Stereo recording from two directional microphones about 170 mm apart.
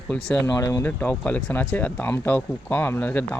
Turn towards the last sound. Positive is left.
turn(degrees=10)  # may be behind; listen again after turning